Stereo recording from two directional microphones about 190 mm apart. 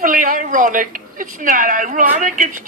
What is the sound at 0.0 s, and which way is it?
A woman's voice, 45° right (ahead or behind).